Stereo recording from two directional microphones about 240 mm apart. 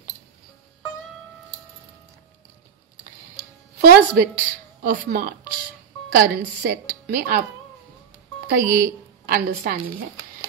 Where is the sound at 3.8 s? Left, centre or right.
Right.